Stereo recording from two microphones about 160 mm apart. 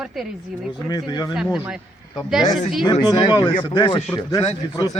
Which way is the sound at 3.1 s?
25° left (ahead or behind).